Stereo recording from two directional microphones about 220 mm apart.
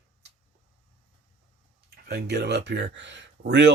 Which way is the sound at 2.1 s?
50° right (ahead or behind).